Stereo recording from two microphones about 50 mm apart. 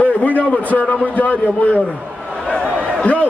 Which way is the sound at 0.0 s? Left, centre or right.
Left.